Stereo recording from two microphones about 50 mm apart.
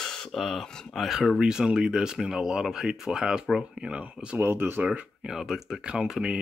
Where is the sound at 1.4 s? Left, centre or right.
Centre.